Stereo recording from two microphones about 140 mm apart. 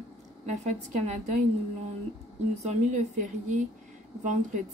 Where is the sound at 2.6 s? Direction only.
55° right (ahead or behind).